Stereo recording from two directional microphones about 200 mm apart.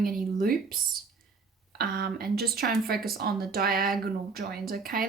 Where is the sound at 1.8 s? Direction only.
50° right (ahead or behind).